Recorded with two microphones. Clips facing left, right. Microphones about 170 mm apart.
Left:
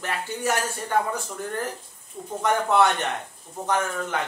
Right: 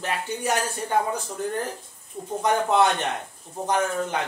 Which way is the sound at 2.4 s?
20° right (ahead or behind).